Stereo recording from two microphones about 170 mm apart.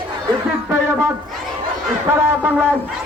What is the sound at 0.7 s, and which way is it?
Music, 15° right (ahead or behind).